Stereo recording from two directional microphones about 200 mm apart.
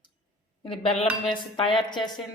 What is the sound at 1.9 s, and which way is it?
Speech, 20° left (ahead or behind).